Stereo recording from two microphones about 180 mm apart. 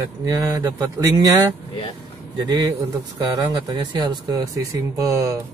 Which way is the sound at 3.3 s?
20° right (ahead or behind).